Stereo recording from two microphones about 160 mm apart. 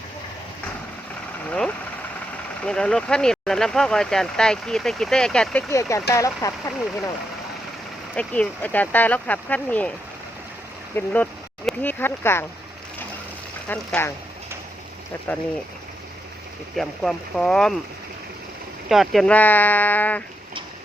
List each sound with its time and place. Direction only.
1.5 s speech: 5° left (ahead or behind)
5.6 s speech: 20° left (ahead or behind)
8.1 s speech: 10° left (ahead or behind)
10.9 s speech: 10° left (ahead or behind)
13.7 s speech: 10° left (ahead or behind)
15.3 s speech: 10° left (ahead or behind)
16.7 s speech: centre (ahead or behind)
18.9 s speech: centre (ahead or behind)